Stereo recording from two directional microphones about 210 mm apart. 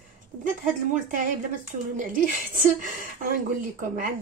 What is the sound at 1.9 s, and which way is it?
Speech, 40° right (ahead or behind).